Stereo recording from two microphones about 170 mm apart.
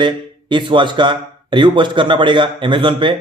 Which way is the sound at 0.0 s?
30° right (ahead or behind).